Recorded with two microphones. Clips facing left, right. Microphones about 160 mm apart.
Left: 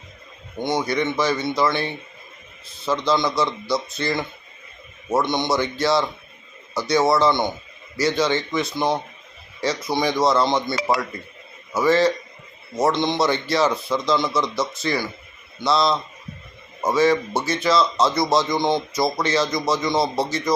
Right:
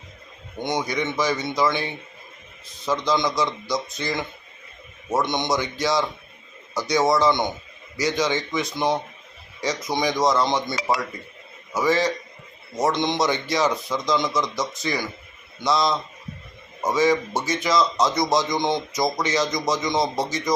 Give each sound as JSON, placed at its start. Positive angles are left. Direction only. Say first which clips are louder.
{"t": 1.1, "sound": "a man's voice", "louder": "left 2 dB", "side_deg": -15}